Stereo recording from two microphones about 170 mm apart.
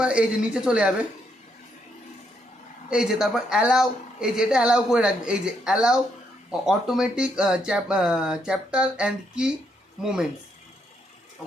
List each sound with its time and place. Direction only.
0.0 s a woman's voice: 5° right (ahead or behind)
2.9 s a woman's voice: 5° right (ahead or behind)